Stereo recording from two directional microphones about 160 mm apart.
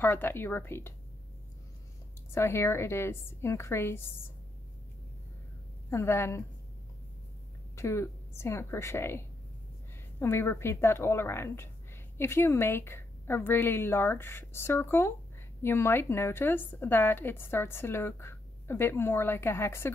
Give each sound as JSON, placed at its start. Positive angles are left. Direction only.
{"t": 0.0, "sound": "a woman's voice", "side_deg": 15}
{"t": 2.3, "sound": "a woman's voice", "side_deg": 15}
{"t": 5.9, "sound": "a woman's voice", "side_deg": 15}
{"t": 7.7, "sound": "a woman's voice", "side_deg": 15}